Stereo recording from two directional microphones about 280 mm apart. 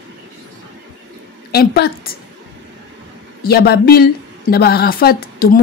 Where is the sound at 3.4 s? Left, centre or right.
Left.